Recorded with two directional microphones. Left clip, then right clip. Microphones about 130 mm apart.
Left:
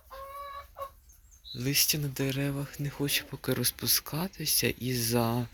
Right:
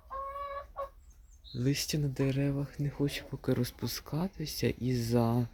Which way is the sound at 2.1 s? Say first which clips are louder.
Even; 25° right (ahead or behind).